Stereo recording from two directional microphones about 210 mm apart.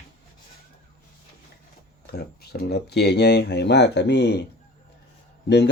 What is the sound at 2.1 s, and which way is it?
Speech, 50° left (ahead or behind).